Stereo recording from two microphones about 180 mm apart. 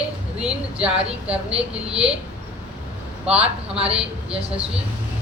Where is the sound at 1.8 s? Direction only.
35° right (ahead or behind).